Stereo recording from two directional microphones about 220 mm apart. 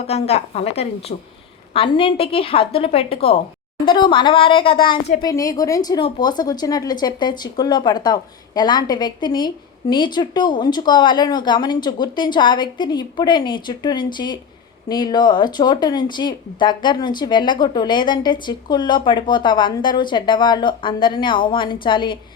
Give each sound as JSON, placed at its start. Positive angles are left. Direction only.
{"t": 0.0, "sound": "speech", "side_deg": 30}